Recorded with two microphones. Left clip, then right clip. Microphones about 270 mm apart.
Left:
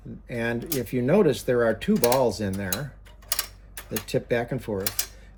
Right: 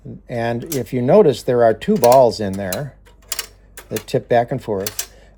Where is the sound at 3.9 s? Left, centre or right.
Right.